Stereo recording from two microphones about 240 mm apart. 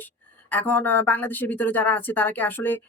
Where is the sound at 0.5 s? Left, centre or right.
Centre.